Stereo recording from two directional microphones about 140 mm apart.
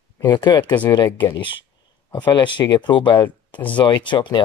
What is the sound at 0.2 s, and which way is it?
Speech, 30° left (ahead or behind).